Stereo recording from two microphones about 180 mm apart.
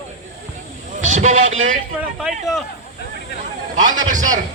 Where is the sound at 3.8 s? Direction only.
45° right (ahead or behind).